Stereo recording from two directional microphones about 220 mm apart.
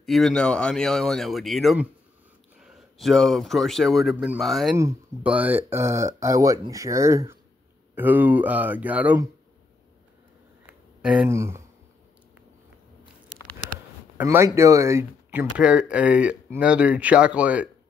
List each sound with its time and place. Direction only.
0.0 s speech: centre (ahead or behind)
10.7 s a sound: 5° right (ahead or behind)
14.1 s speech: 10° right (ahead or behind)